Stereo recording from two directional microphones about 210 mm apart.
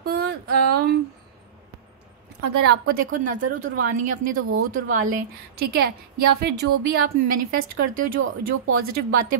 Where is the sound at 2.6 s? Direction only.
45° right (ahead or behind).